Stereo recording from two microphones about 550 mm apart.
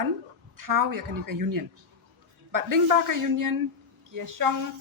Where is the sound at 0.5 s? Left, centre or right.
Right.